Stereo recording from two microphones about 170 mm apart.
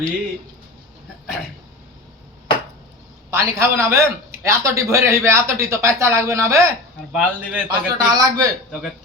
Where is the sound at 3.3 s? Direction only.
15° right (ahead or behind).